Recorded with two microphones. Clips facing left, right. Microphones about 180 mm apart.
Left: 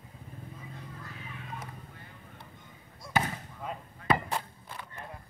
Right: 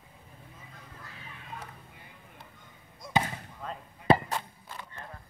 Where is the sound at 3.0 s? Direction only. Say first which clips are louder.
Right 2 dB; 20° right (ahead or behind).